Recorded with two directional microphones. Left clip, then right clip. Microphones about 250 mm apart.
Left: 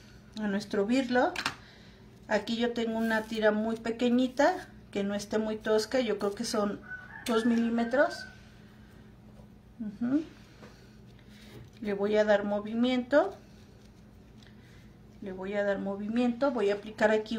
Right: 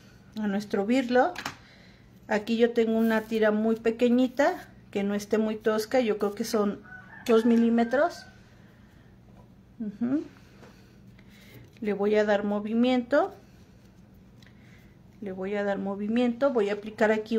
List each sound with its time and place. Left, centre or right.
0.4 s a woman's voice: right
9.9 s speech: right
11.8 s speech: right
15.2 s speech: right